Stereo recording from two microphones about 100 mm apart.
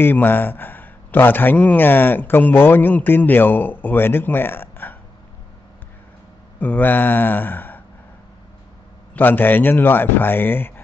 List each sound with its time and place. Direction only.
0.0 s a man's voice: 20° left (ahead or behind)
6.6 s a man's voice: 15° left (ahead or behind)
9.1 s a man's voice: 20° left (ahead or behind)